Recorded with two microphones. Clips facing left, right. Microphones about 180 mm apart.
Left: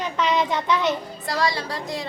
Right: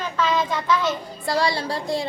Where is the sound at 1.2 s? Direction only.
30° right (ahead or behind).